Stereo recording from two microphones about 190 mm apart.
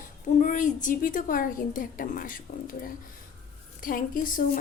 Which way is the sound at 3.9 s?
45° left (ahead or behind).